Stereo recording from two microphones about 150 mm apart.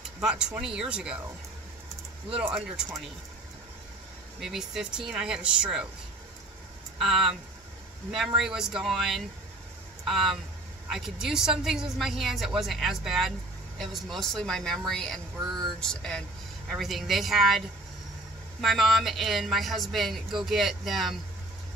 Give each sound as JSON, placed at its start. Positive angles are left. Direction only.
{"t": 0.2, "sound": "speech", "side_deg": -5}
{"t": 2.3, "sound": "speech", "side_deg": -5}
{"t": 4.4, "sound": "speech", "side_deg": 0}
{"t": 7.0, "sound": "speech", "side_deg": 0}
{"t": 8.4, "sound": "speech", "side_deg": -5}
{"t": 15.3, "sound": "speech", "side_deg": -25}
{"t": 15.8, "sound": "speech", "side_deg": 5}